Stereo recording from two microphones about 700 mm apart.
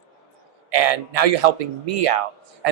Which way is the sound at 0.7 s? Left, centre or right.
Right.